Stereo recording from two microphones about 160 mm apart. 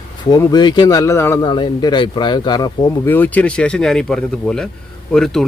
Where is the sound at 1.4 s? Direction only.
30° left (ahead or behind).